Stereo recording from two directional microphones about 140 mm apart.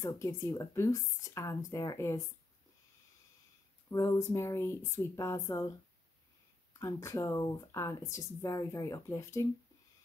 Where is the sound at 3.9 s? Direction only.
20° left (ahead or behind).